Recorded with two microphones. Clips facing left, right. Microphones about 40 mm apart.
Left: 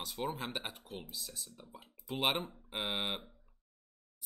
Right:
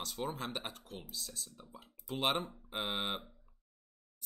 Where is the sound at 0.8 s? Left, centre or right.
Left.